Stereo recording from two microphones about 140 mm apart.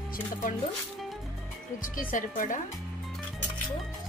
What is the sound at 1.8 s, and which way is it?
Speech, 75° left (ahead or behind).